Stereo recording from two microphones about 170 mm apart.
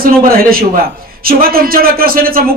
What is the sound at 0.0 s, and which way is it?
A man's voice, 60° right (ahead or behind).